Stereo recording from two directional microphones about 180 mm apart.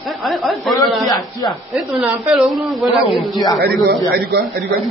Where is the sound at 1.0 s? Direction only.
20° left (ahead or behind).